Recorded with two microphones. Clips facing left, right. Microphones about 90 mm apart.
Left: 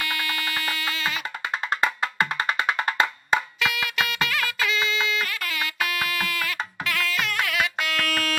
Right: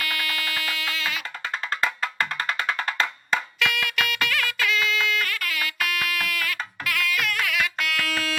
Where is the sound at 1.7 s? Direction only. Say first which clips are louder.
Left 2 dB; 20° left (ahead or behind).